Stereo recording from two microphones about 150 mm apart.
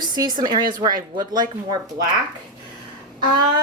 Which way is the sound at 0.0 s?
30° right (ahead or behind).